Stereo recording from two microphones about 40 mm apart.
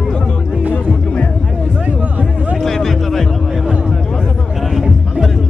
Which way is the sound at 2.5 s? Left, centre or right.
Centre.